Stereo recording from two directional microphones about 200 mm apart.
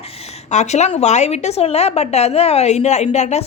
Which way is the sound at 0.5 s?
35° left (ahead or behind).